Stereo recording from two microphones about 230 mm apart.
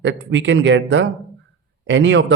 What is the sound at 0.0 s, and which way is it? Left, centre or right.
Speech, right.